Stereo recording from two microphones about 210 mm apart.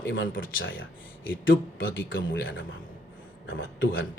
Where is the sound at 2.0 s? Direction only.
65° left (ahead or behind).